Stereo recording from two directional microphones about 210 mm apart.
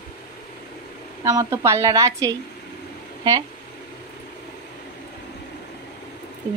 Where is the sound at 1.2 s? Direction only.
15° right (ahead or behind).